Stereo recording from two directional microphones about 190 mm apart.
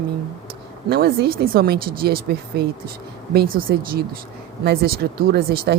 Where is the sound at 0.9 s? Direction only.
55° right (ahead or behind).